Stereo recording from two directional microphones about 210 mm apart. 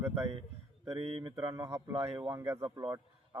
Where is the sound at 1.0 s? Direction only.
25° right (ahead or behind).